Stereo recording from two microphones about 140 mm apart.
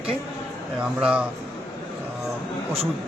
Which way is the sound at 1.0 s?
10° right (ahead or behind).